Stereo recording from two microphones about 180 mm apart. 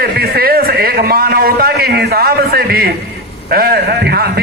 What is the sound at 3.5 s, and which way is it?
Speech, 60° right (ahead or behind).